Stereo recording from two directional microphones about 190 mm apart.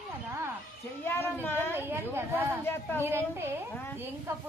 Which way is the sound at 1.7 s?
10° right (ahead or behind).